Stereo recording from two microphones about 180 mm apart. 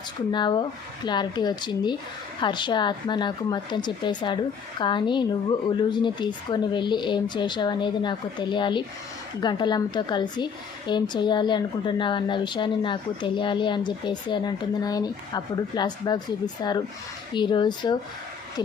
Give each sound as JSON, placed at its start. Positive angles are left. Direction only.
{"t": 0.3, "sound": "a woman's voice", "side_deg": 25}